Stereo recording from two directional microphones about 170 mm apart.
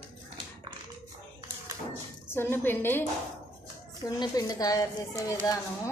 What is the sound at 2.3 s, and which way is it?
Speech, 15° left (ahead or behind).